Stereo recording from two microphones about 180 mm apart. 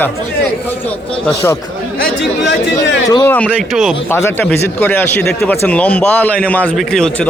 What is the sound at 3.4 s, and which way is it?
Speech, centre (ahead or behind).